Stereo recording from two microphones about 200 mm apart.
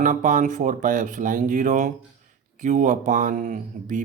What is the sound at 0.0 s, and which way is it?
Speech, 40° right (ahead or behind).